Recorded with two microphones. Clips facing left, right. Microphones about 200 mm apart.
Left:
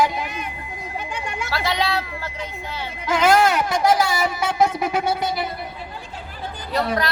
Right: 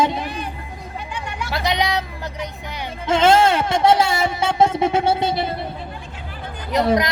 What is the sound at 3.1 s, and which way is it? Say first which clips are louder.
Speech: right 2 dB; 25° right (ahead or behind).